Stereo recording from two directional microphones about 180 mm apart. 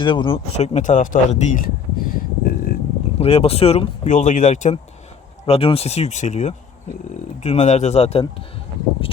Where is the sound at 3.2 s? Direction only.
35° left (ahead or behind).